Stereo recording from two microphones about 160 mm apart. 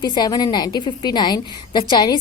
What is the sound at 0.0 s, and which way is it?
A woman's voice, 25° left (ahead or behind).